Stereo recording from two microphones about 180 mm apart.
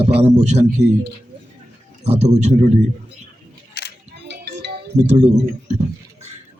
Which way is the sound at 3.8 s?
65° left (ahead or behind).